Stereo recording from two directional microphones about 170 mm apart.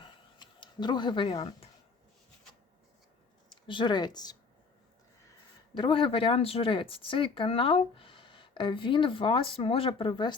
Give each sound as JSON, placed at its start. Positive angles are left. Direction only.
{"t": 0.0, "sound": "a sound", "side_deg": 25}
{"t": 3.5, "sound": "speech", "side_deg": 30}
{"t": 5.7, "sound": "speech", "side_deg": 30}